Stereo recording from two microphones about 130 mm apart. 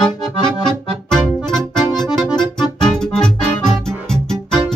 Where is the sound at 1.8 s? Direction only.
5° left (ahead or behind).